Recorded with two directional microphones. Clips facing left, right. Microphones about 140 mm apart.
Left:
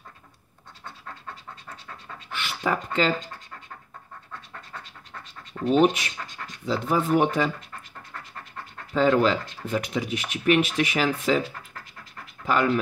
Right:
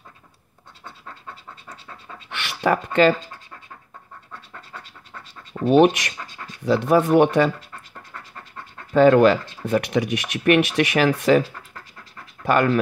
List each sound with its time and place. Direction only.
2.3 s a sound: 70° right (ahead or behind)
5.7 s speech: 70° right (ahead or behind)
8.9 s speech: 65° right (ahead or behind)
12.4 s speech: 65° right (ahead or behind)